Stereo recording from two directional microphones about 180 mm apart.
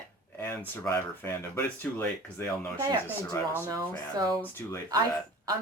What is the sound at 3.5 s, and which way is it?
Speech, 20° right (ahead or behind).